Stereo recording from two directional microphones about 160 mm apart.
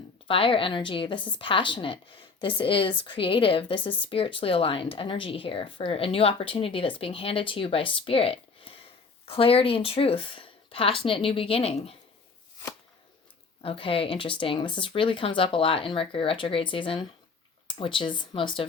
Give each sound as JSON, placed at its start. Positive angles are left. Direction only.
{"t": 0.3, "sound": "speech", "side_deg": 35}
{"t": 13.6, "sound": "speech", "side_deg": 35}